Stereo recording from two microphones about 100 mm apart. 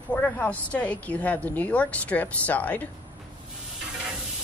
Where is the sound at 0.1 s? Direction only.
10° left (ahead or behind).